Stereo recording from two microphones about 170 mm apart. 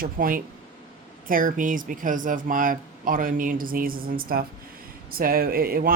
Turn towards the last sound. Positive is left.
turn(degrees=-60)  # may be behind; listen again after turning